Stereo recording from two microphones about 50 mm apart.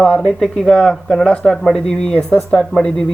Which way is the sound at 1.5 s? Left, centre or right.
Centre.